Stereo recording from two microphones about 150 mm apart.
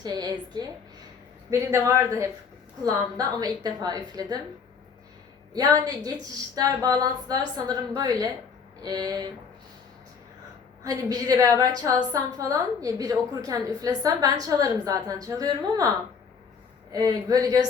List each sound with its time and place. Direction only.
0.0 s a woman's voice: 25° right (ahead or behind)
5.5 s a woman's voice: 25° right (ahead or behind)
10.8 s a woman's voice: 25° right (ahead or behind)
16.9 s a woman's voice: 25° right (ahead or behind)